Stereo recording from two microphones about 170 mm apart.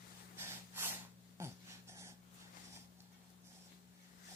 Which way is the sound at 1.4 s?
15° right (ahead or behind).